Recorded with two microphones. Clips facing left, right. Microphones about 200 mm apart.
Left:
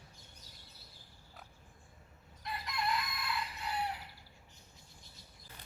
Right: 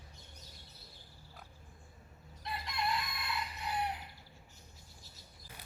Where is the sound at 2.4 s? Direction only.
25° right (ahead or behind).